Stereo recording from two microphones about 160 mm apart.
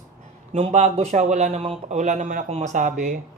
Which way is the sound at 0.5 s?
45° right (ahead or behind).